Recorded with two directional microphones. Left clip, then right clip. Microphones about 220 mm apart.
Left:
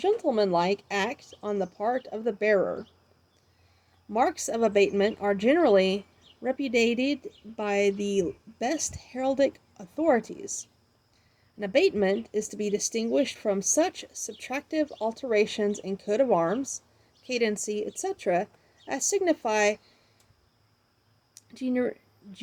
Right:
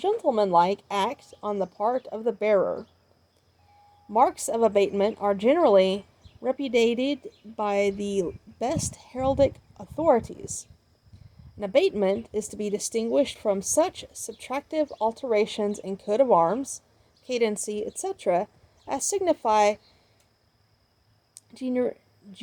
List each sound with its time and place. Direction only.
0.0 s speech: 10° right (ahead or behind)
4.1 s speech: 10° right (ahead or behind)
21.3 s a sound: 10° right (ahead or behind)